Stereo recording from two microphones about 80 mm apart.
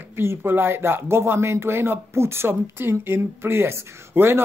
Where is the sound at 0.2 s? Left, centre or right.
Right.